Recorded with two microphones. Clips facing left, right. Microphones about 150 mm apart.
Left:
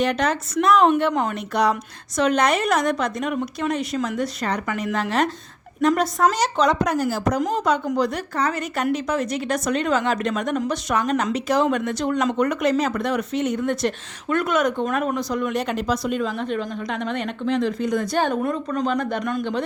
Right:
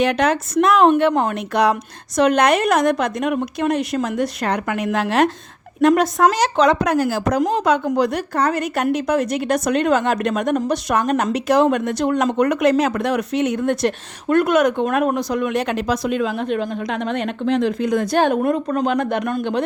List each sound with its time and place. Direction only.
0.0 s a woman's voice: 65° right (ahead or behind)
13.7 s a woman's voice: 60° right (ahead or behind)